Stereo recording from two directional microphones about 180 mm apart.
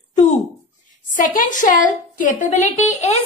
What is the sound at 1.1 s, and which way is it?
A woman's voice, 50° left (ahead or behind).